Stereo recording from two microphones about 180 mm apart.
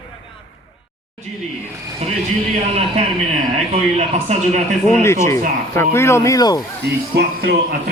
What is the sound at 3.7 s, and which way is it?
Speech, 40° right (ahead or behind).